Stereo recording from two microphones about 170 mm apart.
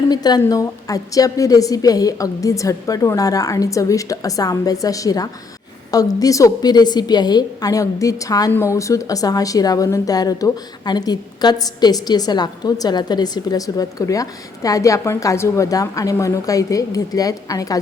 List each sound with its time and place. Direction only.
0.1 s a woman's voice: 25° left (ahead or behind)